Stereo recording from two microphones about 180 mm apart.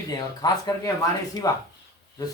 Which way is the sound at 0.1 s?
20° left (ahead or behind).